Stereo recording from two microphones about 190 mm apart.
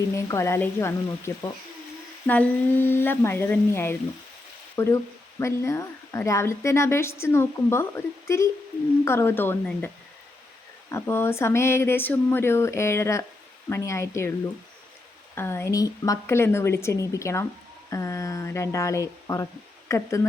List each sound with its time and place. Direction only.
0.1 s speech: 15° left (ahead or behind)
15.4 s speech: 10° left (ahead or behind)